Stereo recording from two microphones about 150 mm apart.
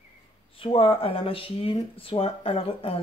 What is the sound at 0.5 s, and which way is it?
Speech, 35° left (ahead or behind).